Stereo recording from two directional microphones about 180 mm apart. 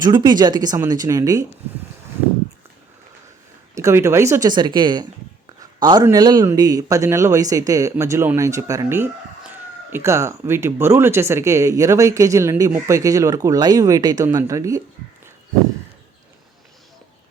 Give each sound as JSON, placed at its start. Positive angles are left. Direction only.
{"t": 0.0, "sound": "speech", "side_deg": -25}
{"t": 3.8, "sound": "speech", "side_deg": -15}